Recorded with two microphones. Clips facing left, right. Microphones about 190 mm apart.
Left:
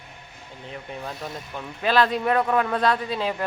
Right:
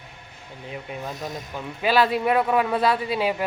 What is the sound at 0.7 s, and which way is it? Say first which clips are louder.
A man's voice: right 2 dB; 5° right (ahead or behind).